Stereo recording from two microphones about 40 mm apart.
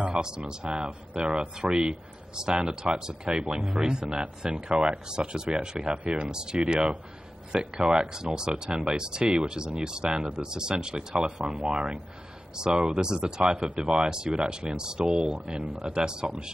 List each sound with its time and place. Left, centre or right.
0.1 s speech: centre